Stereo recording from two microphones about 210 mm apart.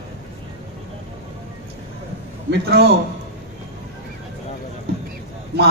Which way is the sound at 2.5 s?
50° right (ahead or behind).